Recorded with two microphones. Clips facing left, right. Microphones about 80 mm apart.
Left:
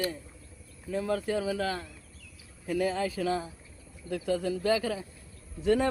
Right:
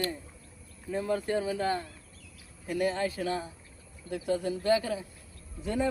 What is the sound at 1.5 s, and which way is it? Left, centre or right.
Speech, left.